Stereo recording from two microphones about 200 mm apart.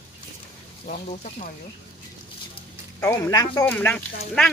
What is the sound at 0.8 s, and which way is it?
Speech, 40° left (ahead or behind).